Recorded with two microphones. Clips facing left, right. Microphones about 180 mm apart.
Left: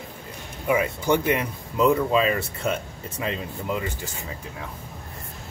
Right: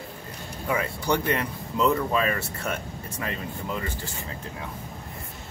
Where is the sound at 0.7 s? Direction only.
15° left (ahead or behind).